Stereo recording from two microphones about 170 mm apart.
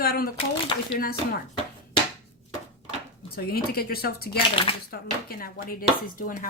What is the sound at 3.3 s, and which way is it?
Speech, 65° left (ahead or behind).